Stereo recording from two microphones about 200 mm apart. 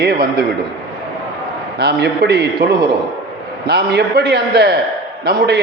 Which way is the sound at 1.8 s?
55° right (ahead or behind).